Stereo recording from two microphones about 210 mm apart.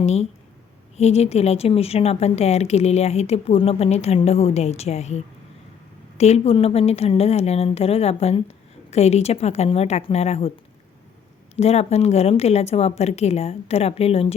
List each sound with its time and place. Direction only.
0.0 s a woman's voice: 30° left (ahead or behind)
11.5 s a woman's voice: 30° left (ahead or behind)